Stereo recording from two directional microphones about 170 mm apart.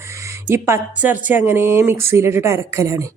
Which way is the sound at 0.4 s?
15° right (ahead or behind).